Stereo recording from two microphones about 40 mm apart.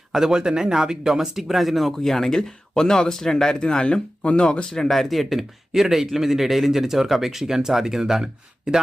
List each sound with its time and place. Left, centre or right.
0.1 s speech: centre
1.9 s speech: centre; by 4.6 s left
4.7 s speech: centre